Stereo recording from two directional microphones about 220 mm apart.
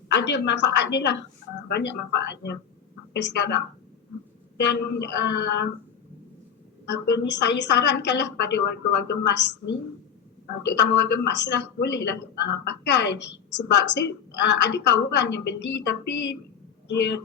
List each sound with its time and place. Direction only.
0.1 s a woman's voice: 55° left (ahead or behind)
6.8 s a woman's voice: 50° left (ahead or behind)